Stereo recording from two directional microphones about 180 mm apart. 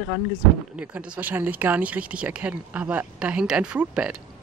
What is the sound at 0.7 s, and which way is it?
Speech, 5° right (ahead or behind).